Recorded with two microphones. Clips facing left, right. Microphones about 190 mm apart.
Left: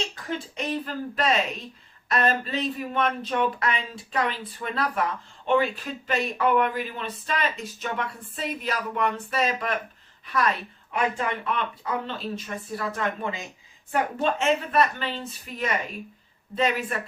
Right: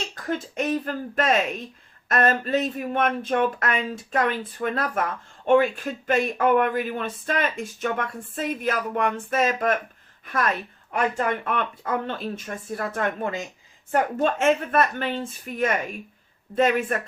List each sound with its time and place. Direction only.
0.3 s speech: 50° right (ahead or behind)